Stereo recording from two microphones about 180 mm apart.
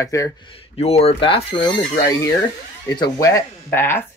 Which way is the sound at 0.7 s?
35° left (ahead or behind).